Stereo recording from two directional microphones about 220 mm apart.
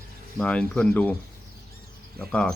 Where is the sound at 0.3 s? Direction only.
5° left (ahead or behind).